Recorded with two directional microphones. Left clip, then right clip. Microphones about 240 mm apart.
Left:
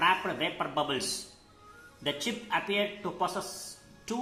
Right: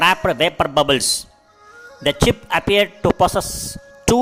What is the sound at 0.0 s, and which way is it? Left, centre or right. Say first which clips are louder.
A man's voice: right 12 dB; right.